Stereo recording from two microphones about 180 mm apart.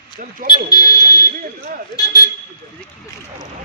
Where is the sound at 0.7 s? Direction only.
20° left (ahead or behind).